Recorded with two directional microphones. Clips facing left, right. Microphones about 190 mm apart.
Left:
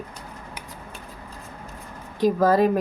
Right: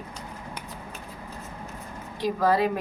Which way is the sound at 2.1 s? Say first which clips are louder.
Left 5 dB; 45° left (ahead or behind).